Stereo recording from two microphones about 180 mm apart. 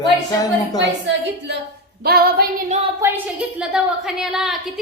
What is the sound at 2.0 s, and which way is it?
Female singing, 60° right (ahead or behind).